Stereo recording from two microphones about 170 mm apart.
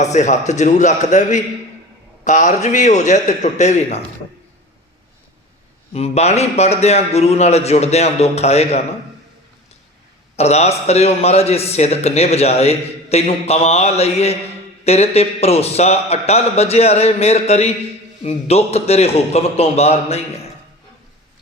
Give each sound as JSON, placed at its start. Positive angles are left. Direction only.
{"t": 0.0, "sound": "a man's voice", "side_deg": 45}
{"t": 5.9, "sound": "a man's voice", "side_deg": 40}
{"t": 10.3, "sound": "a man's voice", "side_deg": 40}